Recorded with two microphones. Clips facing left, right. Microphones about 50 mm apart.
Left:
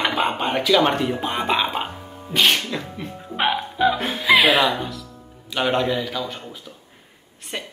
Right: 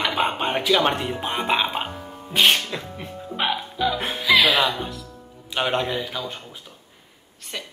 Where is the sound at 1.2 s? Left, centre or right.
Right.